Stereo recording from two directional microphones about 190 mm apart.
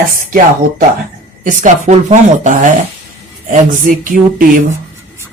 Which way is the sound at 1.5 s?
40° right (ahead or behind).